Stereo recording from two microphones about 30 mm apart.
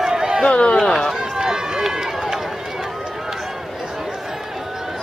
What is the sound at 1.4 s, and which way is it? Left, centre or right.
Run, centre.